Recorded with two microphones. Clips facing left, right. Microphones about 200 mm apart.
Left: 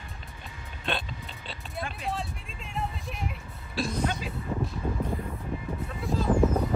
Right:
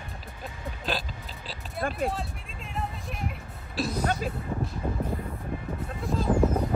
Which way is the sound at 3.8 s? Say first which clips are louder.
Right 1 dB; centre (ahead or behind).